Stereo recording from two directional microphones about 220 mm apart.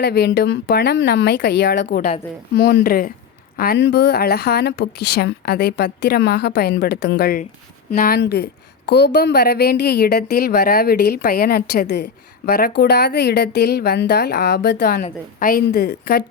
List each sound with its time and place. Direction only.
0.0 s a woman's voice: 50° left (ahead or behind)